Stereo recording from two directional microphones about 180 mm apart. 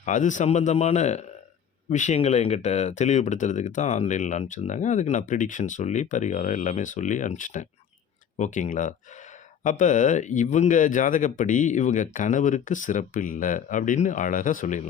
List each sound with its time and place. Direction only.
0.0 s speech: 45° left (ahead or behind)